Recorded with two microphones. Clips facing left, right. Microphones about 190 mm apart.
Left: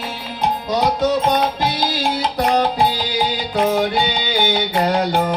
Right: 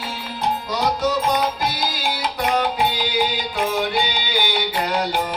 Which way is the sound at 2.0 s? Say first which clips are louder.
Left 3 dB; 35° left (ahead or behind).